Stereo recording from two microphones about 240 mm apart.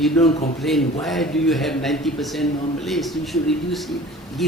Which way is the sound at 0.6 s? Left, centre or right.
Centre.